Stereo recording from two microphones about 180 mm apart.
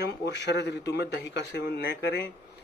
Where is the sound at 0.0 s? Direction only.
65° left (ahead or behind).